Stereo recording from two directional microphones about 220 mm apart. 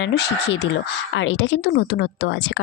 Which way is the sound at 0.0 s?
50° left (ahead or behind).